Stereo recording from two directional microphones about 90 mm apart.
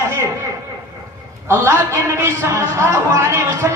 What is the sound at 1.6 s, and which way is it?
Speech, 30° right (ahead or behind).